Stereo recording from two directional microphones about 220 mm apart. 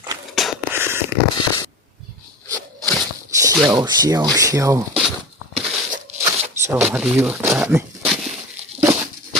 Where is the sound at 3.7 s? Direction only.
15° right (ahead or behind).